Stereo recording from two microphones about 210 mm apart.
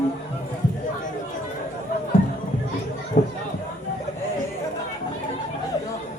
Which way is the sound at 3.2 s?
40° left (ahead or behind).